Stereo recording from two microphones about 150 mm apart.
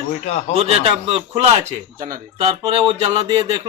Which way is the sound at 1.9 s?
65° right (ahead or behind).